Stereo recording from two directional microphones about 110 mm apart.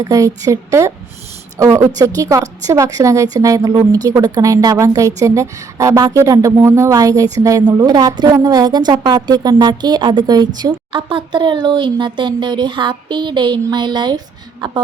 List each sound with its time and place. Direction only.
0.0 s a woman's voice: 30° right (ahead or behind); by 14.8 s 45° right (ahead or behind)